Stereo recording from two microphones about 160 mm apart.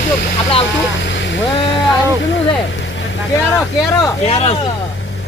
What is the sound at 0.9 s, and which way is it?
Vehicle, 90° left.